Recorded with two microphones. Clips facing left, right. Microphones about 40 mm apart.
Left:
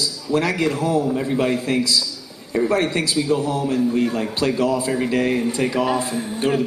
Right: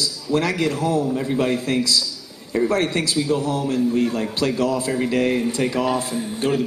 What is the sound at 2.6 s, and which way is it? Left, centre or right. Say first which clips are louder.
A man's voice: left 1 dB; centre.